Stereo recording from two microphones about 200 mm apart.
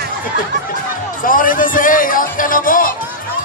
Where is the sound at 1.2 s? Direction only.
45° left (ahead or behind).